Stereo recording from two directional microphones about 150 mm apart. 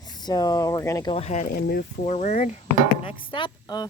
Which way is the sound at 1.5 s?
90° left.